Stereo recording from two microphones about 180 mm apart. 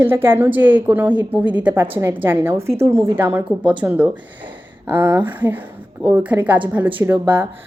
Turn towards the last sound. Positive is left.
turn(degrees=-10)  # may be behind; listen again after turning